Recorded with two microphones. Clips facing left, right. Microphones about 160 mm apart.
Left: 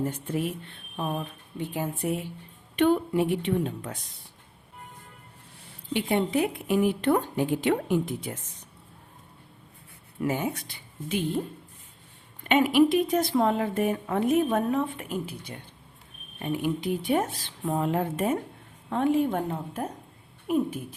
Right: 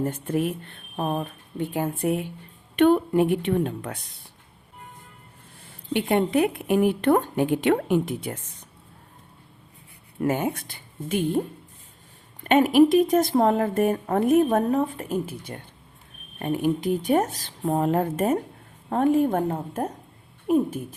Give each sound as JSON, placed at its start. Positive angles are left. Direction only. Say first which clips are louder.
{"t": 0.0, "sound": "a woman's voice", "louder": "right 4 dB", "side_deg": -55}
{"t": 5.9, "sound": "a woman's voice", "louder": "right 4 dB", "side_deg": -55}
{"t": 10.2, "sound": "speech", "louder": "right 4 dB", "side_deg": -50}